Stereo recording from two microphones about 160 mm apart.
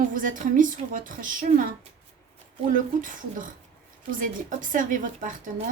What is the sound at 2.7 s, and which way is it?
A woman's voice, 55° right (ahead or behind).